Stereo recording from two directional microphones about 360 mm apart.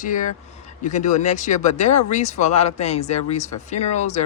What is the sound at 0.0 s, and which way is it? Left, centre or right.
Speech, left.